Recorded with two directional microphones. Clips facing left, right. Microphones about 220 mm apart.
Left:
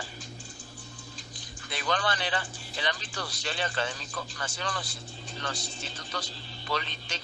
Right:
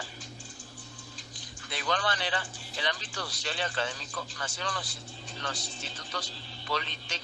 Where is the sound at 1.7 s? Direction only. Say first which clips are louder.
Left 1 dB; 50° left (ahead or behind).